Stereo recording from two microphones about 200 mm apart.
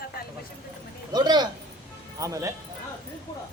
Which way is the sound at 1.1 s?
20° right (ahead or behind).